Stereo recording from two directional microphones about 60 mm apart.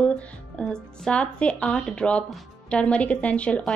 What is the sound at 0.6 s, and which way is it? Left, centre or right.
A woman's voice, centre.